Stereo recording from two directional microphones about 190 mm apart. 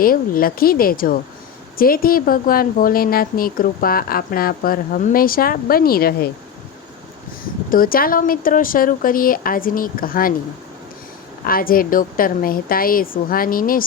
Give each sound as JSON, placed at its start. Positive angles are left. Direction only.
{"t": 0.0, "sound": "speech", "side_deg": 50}
{"t": 7.7, "sound": "speech", "side_deg": 50}
{"t": 11.4, "sound": "speech", "side_deg": 50}